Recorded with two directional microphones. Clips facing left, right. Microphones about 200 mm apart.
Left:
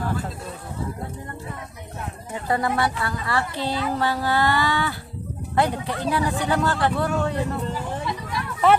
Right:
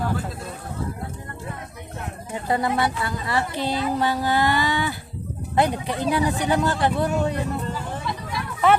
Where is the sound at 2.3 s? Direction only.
20° right (ahead or behind).